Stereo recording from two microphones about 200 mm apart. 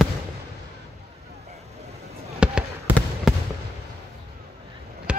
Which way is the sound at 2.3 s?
5° right (ahead or behind).